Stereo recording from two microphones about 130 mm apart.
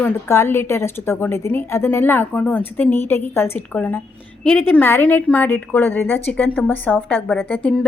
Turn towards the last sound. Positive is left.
turn(degrees=10)  # may be behind; listen again after turning